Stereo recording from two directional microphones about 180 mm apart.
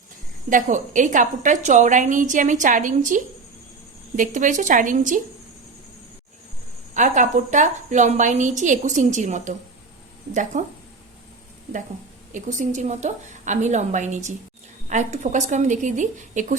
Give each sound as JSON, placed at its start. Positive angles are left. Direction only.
{"t": 0.5, "sound": "a woman's voice", "side_deg": -45}
{"t": 4.2, "sound": "a woman's voice", "side_deg": -45}
{"t": 6.9, "sound": "a woman's voice", "side_deg": -45}
{"t": 12.3, "sound": "a woman's voice", "side_deg": -40}